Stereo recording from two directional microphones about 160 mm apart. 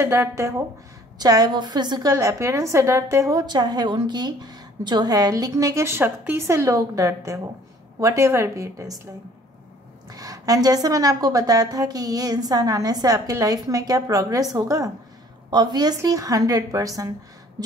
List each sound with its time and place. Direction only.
0.0 s a woman's voice: 15° right (ahead or behind)